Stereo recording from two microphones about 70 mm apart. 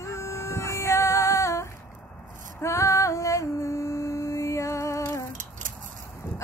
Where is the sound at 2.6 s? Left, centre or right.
Left.